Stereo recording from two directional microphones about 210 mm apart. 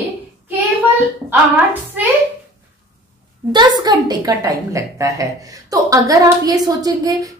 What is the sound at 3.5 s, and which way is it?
A woman's voice, 20° right (ahead or behind).